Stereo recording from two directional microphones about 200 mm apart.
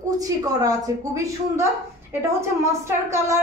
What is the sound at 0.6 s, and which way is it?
A woman's voice, 15° right (ahead or behind).